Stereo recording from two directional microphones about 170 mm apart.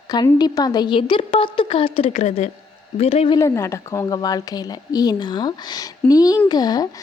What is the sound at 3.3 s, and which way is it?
A woman's voice, 15° left (ahead or behind).